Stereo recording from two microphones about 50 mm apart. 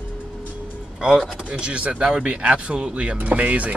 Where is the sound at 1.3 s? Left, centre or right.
Right.